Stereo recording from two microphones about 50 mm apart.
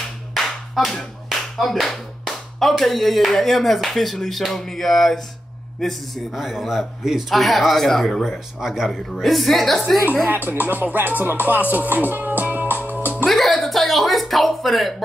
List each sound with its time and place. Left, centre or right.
0.3 s clapping: centre
2.8 s a man's voice: centre
7.3 s speech: centre
8.2 s speech: centre
10.2 s music: right
13.3 s a sound: centre